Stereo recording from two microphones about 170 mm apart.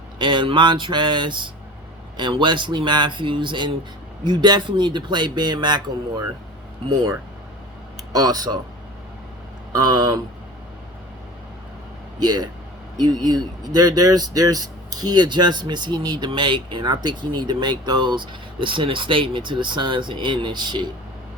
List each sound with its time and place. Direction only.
0.2 s speech: 30° right (ahead or behind)
6.8 s speech: 25° right (ahead or behind)
8.2 s speech: 25° right (ahead or behind)
9.7 s speech: 25° right (ahead or behind)
12.2 s speech: 25° right (ahead or behind)